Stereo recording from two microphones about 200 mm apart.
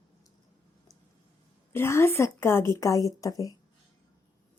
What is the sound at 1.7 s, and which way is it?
A woman's voice, 10° left (ahead or behind).